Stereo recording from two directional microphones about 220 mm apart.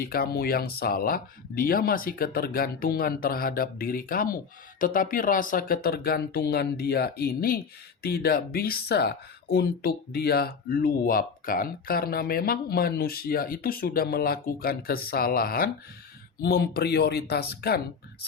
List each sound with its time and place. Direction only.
0.0 s speech: 45° left (ahead or behind)